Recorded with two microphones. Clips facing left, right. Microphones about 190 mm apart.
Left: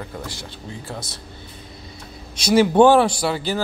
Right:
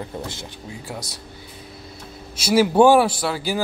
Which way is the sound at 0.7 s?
10° right (ahead or behind).